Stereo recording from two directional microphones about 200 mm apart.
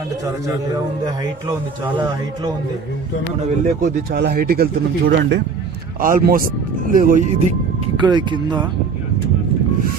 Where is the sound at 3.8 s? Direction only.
50° right (ahead or behind); by 8.7 s 20° right (ahead or behind).